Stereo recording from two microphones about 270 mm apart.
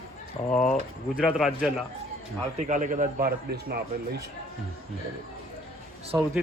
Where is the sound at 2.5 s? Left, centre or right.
Right.